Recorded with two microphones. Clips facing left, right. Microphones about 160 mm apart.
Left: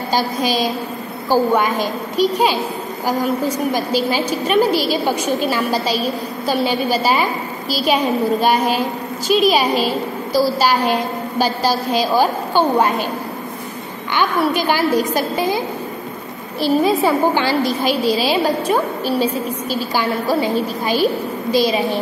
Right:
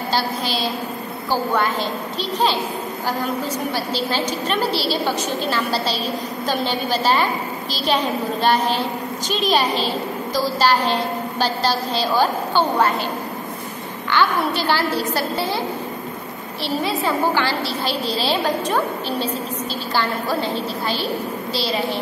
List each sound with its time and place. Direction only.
0.1 s a woman's voice: 15° left (ahead or behind)
14.1 s a woman's voice: 15° left (ahead or behind)
17.0 s a woman's voice: 20° left (ahead or behind)